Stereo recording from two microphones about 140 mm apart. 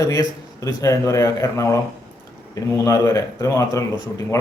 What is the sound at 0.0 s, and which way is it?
Speech, 25° left (ahead or behind).